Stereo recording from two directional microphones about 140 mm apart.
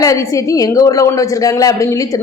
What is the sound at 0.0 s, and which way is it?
A woman's voice, 25° left (ahead or behind).